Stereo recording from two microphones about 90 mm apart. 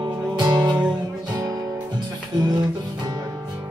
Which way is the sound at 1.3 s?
45° right (ahead or behind).